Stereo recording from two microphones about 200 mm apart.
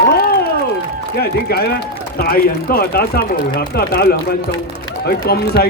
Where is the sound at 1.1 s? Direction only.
50° left (ahead or behind).